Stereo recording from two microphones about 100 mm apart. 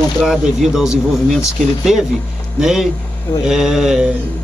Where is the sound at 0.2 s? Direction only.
5° right (ahead or behind).